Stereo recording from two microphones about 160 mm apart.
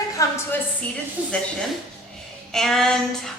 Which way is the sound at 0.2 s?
20° left (ahead or behind).